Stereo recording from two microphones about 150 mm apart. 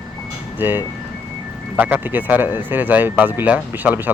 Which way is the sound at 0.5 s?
15° right (ahead or behind).